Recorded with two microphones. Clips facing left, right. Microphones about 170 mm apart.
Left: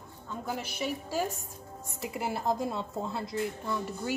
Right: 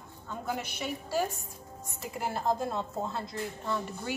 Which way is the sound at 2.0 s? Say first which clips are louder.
Left 1 dB; 10° left (ahead or behind).